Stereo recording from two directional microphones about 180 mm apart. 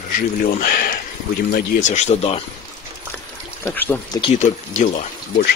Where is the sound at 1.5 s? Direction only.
45° left (ahead or behind).